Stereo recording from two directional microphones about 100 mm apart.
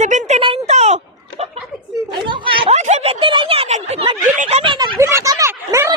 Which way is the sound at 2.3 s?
60° right (ahead or behind).